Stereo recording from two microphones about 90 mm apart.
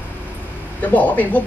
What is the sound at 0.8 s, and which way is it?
Speech, 15° left (ahead or behind).